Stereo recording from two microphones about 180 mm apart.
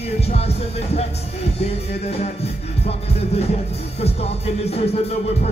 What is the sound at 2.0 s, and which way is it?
Music, 35° left (ahead or behind).